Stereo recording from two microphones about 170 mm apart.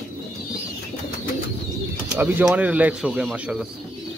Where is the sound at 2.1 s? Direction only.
10° right (ahead or behind).